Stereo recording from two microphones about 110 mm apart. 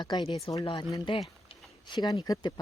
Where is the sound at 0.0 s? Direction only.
45° left (ahead or behind).